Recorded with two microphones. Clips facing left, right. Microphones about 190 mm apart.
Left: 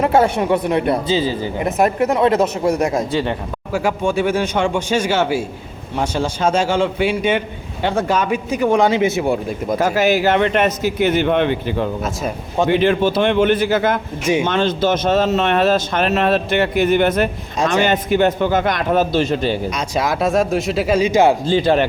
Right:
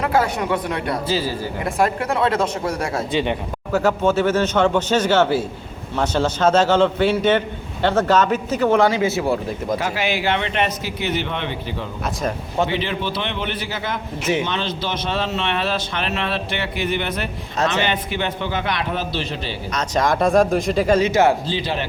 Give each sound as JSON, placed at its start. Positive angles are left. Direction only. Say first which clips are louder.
{"t": 0.0, "sound": "a man's voice", "louder": "left 5 dB", "side_deg": 25}
{"t": 3.1, "sound": "speech", "louder": "left 1 dB", "side_deg": -20}
{"t": 3.7, "sound": "a man's voice", "louder": "right 1 dB", "side_deg": 10}
{"t": 9.7, "sound": "speech", "louder": "left 9 dB", "side_deg": 45}
{"t": 19.7, "sound": "speech", "louder": "even", "side_deg": 10}
{"t": 21.4, "sound": "speech", "louder": "left 9 dB", "side_deg": 50}